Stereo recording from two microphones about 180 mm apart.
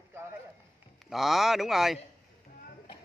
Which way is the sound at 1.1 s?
Centre (ahead or behind).